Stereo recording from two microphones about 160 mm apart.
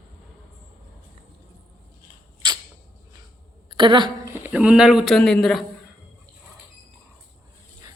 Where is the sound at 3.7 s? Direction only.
30° right (ahead or behind).